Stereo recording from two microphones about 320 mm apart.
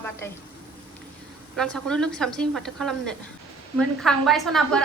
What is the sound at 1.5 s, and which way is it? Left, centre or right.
A woman's voice, centre.